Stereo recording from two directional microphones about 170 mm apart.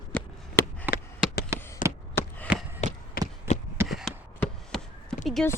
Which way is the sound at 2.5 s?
5° right (ahead or behind).